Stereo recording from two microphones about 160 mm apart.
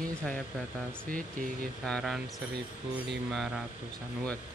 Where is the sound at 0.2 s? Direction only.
Centre (ahead or behind).